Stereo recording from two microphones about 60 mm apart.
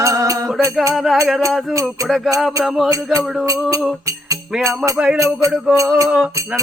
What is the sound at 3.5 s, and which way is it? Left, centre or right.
Music, right.